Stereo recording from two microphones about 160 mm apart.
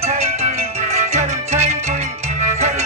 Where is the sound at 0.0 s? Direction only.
45° right (ahead or behind).